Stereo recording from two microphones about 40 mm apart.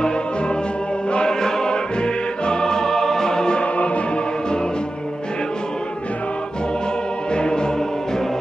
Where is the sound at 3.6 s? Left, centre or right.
Left.